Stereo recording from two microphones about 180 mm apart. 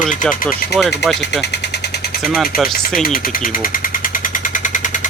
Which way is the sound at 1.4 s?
70° left (ahead or behind).